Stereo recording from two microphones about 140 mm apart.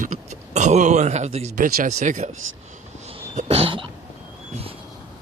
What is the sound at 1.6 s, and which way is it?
Speech, 65° right (ahead or behind).